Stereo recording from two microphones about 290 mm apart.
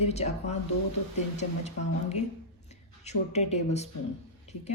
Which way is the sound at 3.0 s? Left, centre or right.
Left.